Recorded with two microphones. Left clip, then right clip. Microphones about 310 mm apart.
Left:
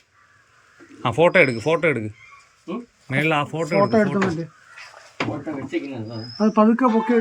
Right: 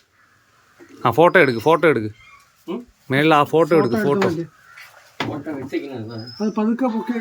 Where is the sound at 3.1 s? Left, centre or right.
Centre.